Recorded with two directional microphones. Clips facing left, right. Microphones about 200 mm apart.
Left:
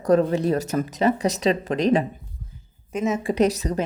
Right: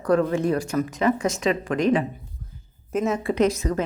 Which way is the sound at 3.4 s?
40° left (ahead or behind).